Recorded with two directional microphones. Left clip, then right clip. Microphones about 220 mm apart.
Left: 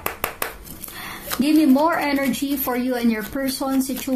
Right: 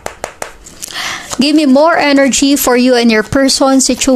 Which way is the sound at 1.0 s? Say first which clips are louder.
Right 10 dB; 45° right (ahead or behind).